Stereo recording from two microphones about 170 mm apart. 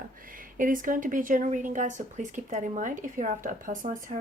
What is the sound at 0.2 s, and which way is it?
Speech, 55° right (ahead or behind).